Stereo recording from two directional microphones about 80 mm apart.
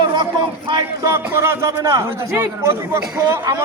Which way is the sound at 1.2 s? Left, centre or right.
Right.